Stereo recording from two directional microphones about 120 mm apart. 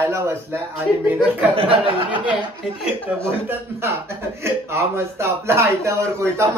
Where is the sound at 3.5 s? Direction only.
20° right (ahead or behind).